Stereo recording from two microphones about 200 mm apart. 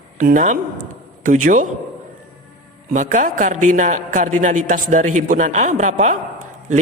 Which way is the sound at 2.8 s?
40° right (ahead or behind).